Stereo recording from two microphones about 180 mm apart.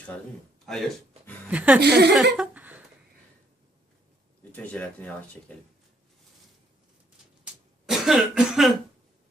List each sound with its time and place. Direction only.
0.6 s speech: centre (ahead or behind)
1.8 s speech: 65° right (ahead or behind)
2.3 s a sound: 5° right (ahead or behind)
4.5 s speech: 10° left (ahead or behind)
7.9 s cough: centre (ahead or behind)